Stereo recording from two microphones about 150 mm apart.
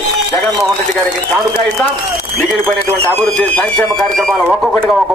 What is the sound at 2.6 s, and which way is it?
A man's voice, 10° left (ahead or behind).